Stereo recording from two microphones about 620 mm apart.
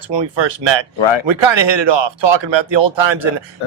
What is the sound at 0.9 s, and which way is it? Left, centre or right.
Speech, left.